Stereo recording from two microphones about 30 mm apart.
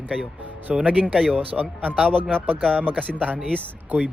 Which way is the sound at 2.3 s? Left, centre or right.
Right.